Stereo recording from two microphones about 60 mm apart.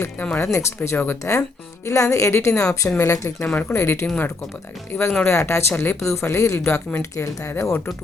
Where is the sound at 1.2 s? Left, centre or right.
Left.